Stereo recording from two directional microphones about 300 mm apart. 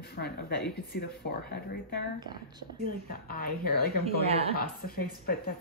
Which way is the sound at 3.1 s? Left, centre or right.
Left.